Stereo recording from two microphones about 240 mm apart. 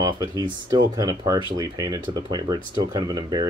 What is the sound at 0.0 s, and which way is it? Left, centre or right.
Speech, centre.